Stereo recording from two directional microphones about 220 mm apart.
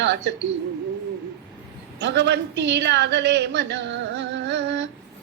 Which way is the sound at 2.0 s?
50° right (ahead or behind).